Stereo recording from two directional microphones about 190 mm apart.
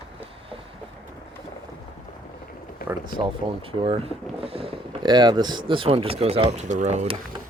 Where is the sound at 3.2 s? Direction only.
30° right (ahead or behind).